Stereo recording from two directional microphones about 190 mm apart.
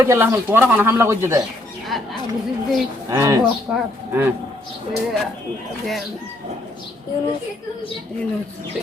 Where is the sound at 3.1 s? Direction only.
15° right (ahead or behind).